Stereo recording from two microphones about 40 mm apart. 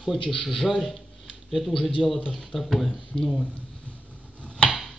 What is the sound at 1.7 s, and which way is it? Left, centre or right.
Speech, centre.